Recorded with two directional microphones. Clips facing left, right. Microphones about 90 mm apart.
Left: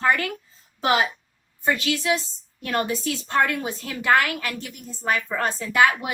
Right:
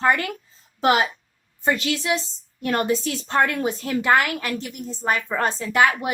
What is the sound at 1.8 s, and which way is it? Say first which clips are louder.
Speech: even; 25° right (ahead or behind).